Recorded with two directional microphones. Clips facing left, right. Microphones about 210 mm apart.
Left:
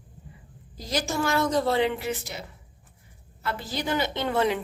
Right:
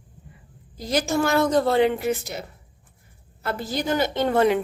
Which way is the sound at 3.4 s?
45° right (ahead or behind).